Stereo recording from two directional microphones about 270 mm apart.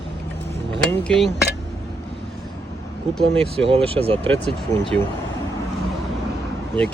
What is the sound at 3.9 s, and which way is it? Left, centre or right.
Speech, right.